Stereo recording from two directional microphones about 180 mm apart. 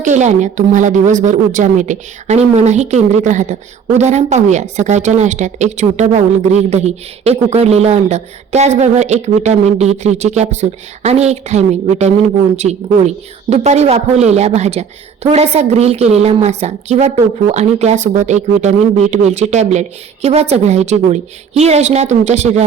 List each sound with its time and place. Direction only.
0.0 s speech: 40° right (ahead or behind)